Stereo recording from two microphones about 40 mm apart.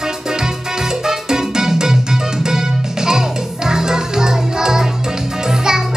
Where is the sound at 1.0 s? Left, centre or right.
Centre.